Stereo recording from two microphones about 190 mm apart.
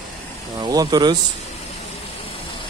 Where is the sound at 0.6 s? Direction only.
20° right (ahead or behind).